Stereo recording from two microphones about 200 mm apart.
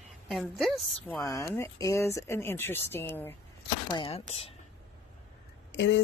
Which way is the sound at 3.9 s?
30° left (ahead or behind).